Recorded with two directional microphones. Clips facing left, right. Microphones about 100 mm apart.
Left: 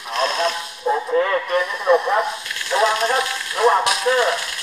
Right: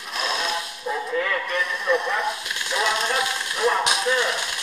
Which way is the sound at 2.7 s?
35° left (ahead or behind).